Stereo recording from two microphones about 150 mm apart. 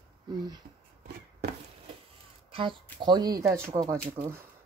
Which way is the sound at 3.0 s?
30° right (ahead or behind).